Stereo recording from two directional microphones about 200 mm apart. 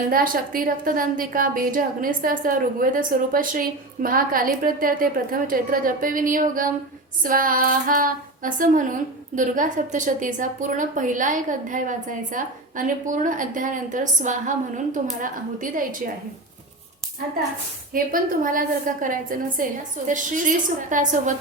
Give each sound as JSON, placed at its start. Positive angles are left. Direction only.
{"t": 0.1, "sound": "a woman's voice", "side_deg": -45}
{"t": 7.2, "sound": "female singing", "side_deg": -45}
{"t": 17.9, "sound": "a woman's voice", "side_deg": -45}
{"t": 20.1, "sound": "female singing", "side_deg": -40}